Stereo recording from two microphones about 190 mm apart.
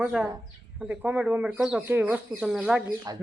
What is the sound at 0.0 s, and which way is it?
Speech, 5° right (ahead or behind).